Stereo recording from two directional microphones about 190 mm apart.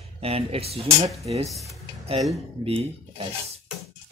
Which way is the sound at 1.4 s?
Centre (ahead or behind).